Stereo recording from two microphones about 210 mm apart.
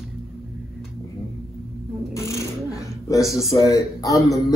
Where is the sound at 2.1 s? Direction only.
15° left (ahead or behind).